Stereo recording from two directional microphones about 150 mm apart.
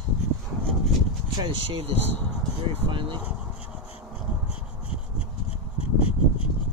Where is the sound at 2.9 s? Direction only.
35° right (ahead or behind).